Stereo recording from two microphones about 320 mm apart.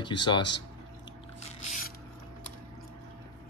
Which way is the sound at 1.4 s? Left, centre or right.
Centre.